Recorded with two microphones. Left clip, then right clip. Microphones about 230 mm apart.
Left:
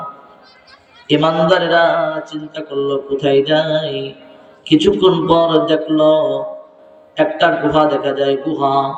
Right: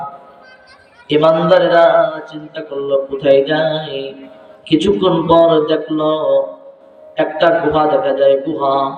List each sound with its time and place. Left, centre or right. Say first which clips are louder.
1.0 s speech: right 2 dB; left